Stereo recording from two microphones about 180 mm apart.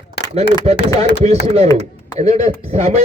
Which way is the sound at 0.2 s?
70° left (ahead or behind).